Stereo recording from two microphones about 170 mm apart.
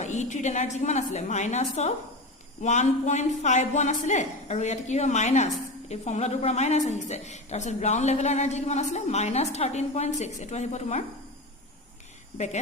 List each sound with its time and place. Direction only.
0.0 s a woman's voice: 45° left (ahead or behind)